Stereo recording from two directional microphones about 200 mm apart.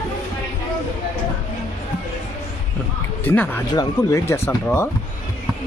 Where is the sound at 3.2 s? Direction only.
10° left (ahead or behind).